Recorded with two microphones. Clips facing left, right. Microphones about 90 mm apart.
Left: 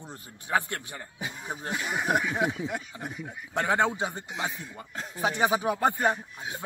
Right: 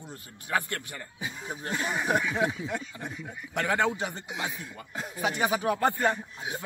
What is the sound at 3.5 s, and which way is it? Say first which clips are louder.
Speech: left 1 dB; 20° left (ahead or behind).